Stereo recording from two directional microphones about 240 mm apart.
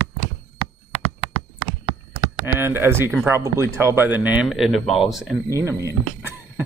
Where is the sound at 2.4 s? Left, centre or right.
Centre.